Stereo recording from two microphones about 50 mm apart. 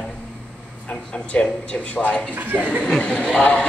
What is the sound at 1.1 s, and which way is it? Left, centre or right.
Speech, left.